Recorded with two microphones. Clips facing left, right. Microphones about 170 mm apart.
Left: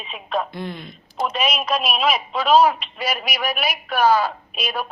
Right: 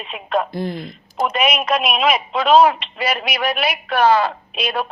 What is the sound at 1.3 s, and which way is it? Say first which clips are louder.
Speech: right 5 dB; 55° right (ahead or behind).